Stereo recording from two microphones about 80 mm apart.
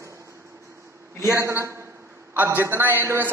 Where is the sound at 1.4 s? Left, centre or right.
Right.